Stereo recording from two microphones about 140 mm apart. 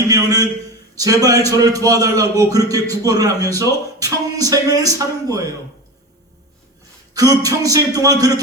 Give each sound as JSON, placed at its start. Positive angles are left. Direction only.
{"t": 0.1, "sound": "a sound", "side_deg": -25}
{"t": 0.9, "sound": "a man's voice", "side_deg": -25}
{"t": 7.1, "sound": "a man's voice", "side_deg": -25}